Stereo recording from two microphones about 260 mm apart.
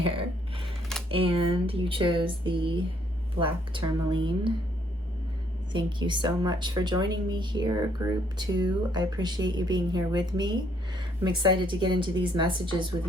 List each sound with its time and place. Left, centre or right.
0.0 s typing: right
1.1 s speech: right
5.7 s speech: centre